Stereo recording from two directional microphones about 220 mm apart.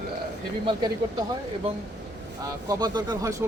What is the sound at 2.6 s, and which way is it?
Speech, 15° right (ahead or behind).